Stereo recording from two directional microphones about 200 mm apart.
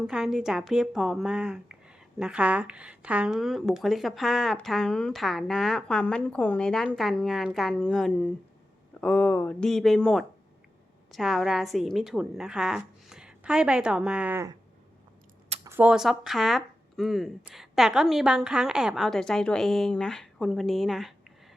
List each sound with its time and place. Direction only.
0.1 s a woman's voice: 5° right (ahead or behind)
15.6 s a woman's voice: 10° right (ahead or behind)